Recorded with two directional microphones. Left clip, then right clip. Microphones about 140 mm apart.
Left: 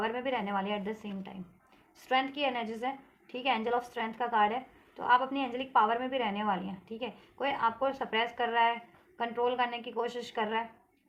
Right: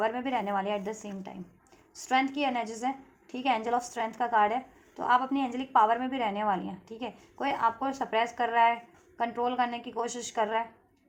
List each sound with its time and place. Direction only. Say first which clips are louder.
0.0 s a woman's voice: right 3 dB; 40° right (ahead or behind)